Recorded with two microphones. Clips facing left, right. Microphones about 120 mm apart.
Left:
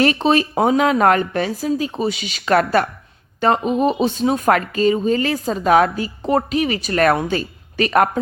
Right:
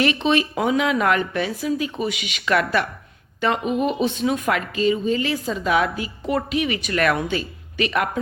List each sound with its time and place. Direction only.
0.0 s speech: 40° left (ahead or behind)